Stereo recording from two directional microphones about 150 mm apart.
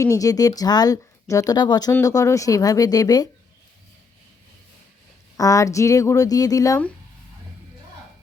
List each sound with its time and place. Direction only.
0.0 s speech: 25° left (ahead or behind)
5.4 s speech: 20° left (ahead or behind)